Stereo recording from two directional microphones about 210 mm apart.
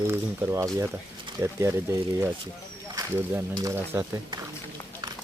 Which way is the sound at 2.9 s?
15° right (ahead or behind).